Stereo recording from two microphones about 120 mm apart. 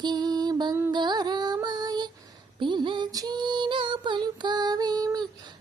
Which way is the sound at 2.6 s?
40° right (ahead or behind).